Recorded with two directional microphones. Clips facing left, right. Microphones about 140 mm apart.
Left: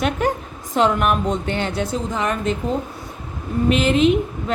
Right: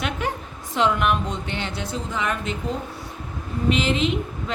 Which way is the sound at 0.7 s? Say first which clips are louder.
Left 3 dB; 45° left (ahead or behind).